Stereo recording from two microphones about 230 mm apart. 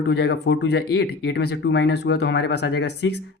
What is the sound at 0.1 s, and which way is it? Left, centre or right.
Speech, left.